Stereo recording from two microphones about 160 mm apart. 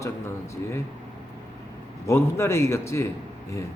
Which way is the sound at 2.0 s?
15° left (ahead or behind).